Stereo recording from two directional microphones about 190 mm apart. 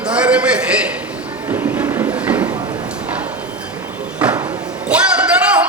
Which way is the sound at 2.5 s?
20° right (ahead or behind).